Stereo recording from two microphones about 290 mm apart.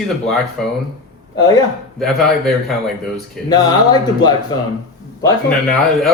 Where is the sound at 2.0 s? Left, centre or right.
Centre.